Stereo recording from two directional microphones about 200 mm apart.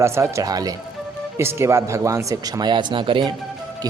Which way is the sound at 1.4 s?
15° right (ahead or behind).